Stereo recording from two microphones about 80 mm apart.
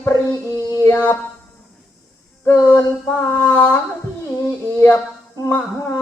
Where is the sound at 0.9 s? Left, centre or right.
Left.